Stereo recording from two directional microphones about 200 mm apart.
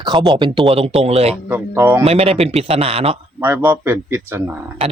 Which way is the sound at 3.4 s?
10° right (ahead or behind).